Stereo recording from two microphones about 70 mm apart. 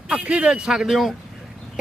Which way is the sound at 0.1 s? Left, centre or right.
Centre.